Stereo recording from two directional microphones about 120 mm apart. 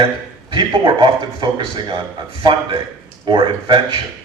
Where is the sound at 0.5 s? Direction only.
40° right (ahead or behind).